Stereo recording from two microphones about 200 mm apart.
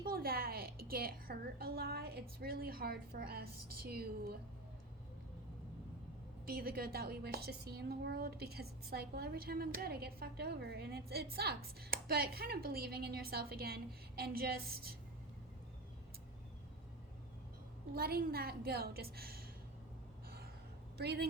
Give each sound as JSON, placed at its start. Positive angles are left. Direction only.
{"t": 0.0, "sound": "a woman's voice", "side_deg": -50}
{"t": 6.4, "sound": "a woman's voice", "side_deg": -50}
{"t": 17.9, "sound": "a woman's voice", "side_deg": -50}
{"t": 21.0, "sound": "a woman's voice", "side_deg": -55}